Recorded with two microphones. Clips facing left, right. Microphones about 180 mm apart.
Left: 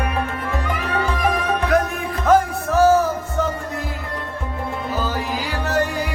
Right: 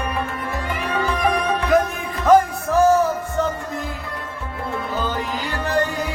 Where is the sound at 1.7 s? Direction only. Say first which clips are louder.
Right 3 dB; centre (ahead or behind).